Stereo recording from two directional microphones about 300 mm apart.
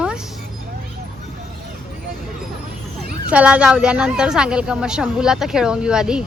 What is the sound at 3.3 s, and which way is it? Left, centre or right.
A woman's voice, centre.